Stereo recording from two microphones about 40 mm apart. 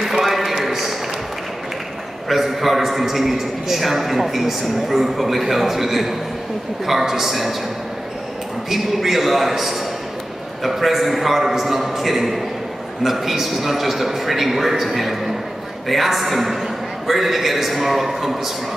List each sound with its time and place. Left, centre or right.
0.0 s a sound: centre
2.2 s a man's voice: centre
8.6 s a man's voice: centre